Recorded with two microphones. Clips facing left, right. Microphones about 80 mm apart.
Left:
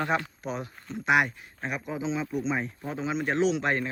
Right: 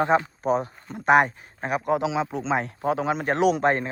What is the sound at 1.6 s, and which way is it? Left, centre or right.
Speech, right.